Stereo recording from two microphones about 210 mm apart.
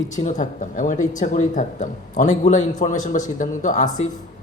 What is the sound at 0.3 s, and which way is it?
Speech, 35° left (ahead or behind).